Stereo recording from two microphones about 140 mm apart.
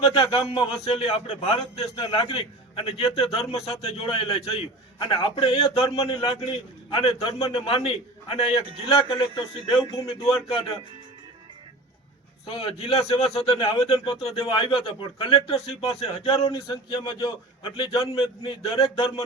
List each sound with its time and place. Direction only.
0.1 s a man's voice: 30° left (ahead or behind)
0.9 s a man's voice: 45° left (ahead or behind)
1.8 s a man's voice: 35° left (ahead or behind)
12.5 s a man's voice: 40° left (ahead or behind)
13.5 s speech: 25° left (ahead or behind)
13.8 s a man's voice: 40° left (ahead or behind)